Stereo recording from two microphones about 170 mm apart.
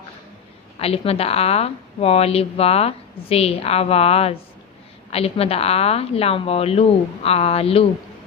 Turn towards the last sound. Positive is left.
turn(degrees=35)  # may be behind; listen again after turning